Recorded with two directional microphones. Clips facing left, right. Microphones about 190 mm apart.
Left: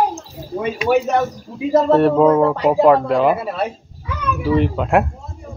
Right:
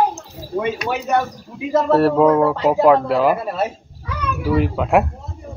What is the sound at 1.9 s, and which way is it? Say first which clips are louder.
Speech: even; centre (ahead or behind).